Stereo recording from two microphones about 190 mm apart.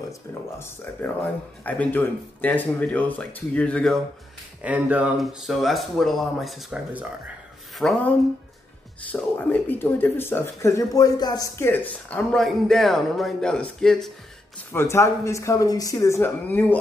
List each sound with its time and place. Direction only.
0.3 s speech: 10° left (ahead or behind)
4.6 s speech: 10° right (ahead or behind)
9.1 s speech: 10° left (ahead or behind)
14.7 s speech: 15° left (ahead or behind)